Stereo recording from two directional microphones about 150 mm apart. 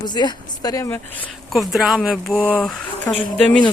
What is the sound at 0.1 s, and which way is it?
Speech, 30° left (ahead or behind).